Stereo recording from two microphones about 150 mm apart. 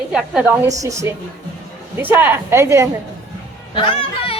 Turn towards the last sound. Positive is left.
turn(degrees=35)  # may be behind; listen again after turning